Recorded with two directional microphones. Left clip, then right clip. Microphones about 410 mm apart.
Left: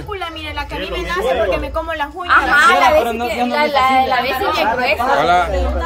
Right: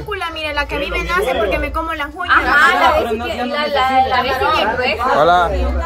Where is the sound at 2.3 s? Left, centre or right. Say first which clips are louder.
Left 1 dB; centre.